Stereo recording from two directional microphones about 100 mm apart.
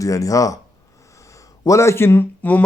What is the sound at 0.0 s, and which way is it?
Speech, 35° left (ahead or behind).